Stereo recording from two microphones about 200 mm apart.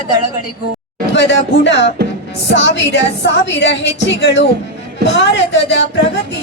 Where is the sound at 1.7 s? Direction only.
60° left (ahead or behind).